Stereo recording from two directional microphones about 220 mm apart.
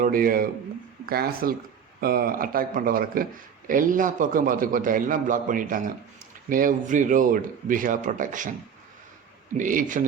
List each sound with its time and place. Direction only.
0.0 s a man's voice: 40° right (ahead or behind)
9.6 s a man's voice: 35° right (ahead or behind)